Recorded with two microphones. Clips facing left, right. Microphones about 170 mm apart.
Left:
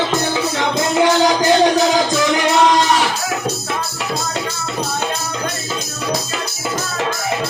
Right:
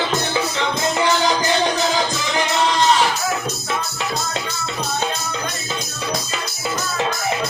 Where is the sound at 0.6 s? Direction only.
55° left (ahead or behind).